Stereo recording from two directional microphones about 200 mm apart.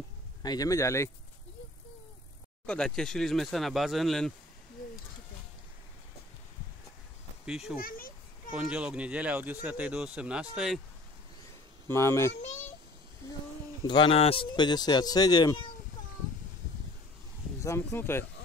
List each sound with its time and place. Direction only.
0.4 s speech: 20° left (ahead or behind)
2.6 s speech: 5° left (ahead or behind)
7.4 s speech: 5° right (ahead or behind)
11.9 s speech: 15° left (ahead or behind)
13.8 s speech: 25° left (ahead or behind)
17.6 s speech: 15° left (ahead or behind)